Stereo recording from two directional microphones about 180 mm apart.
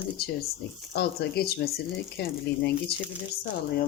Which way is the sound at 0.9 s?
65° left (ahead or behind).